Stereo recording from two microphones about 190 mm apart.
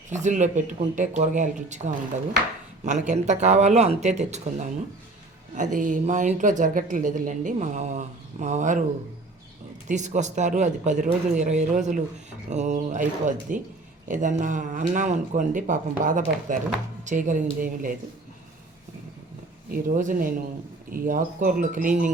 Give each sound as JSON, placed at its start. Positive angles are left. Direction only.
{"t": 0.1, "sound": "speech", "side_deg": -40}
{"t": 9.9, "sound": "speech", "side_deg": -40}
{"t": 19.7, "sound": "speech", "side_deg": -45}